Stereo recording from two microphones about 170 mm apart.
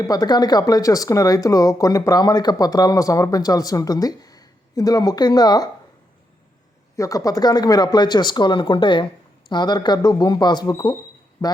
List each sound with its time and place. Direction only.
0.1 s speech: 25° left (ahead or behind)
6.9 s speech: 20° left (ahead or behind)